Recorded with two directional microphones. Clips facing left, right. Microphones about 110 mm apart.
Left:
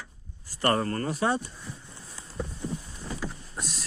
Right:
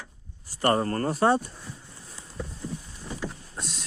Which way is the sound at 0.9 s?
40° right (ahead or behind).